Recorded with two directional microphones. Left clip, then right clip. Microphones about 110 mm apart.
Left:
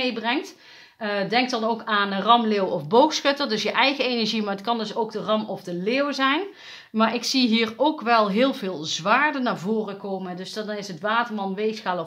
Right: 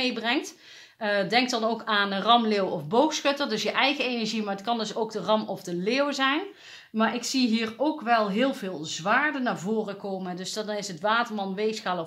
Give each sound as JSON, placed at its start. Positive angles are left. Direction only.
{"t": 0.0, "sound": "speech", "side_deg": 10}
{"t": 2.9, "sound": "a woman's voice", "side_deg": 30}
{"t": 4.7, "sound": "speech", "side_deg": 5}
{"t": 7.0, "sound": "speech", "side_deg": 35}
{"t": 9.8, "sound": "speech", "side_deg": 10}